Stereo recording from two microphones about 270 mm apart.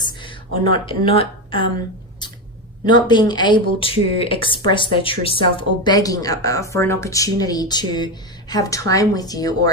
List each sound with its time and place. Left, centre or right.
0.0 s speech: centre
2.8 s speech: centre